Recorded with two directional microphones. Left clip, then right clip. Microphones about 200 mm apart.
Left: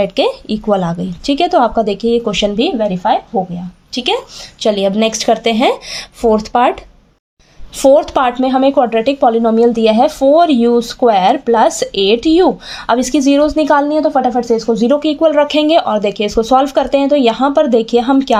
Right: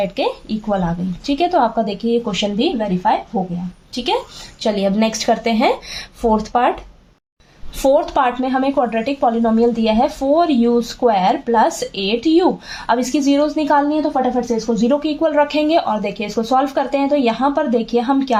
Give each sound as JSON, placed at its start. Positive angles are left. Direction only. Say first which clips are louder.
{"t": 0.0, "sound": "a woman's voice", "louder": "left 6 dB", "side_deg": 45}
{"t": 7.8, "sound": "a woman's voice", "louder": "left 5 dB", "side_deg": 40}